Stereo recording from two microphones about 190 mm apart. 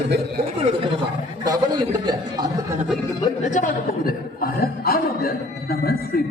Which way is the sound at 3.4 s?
40° left (ahead or behind).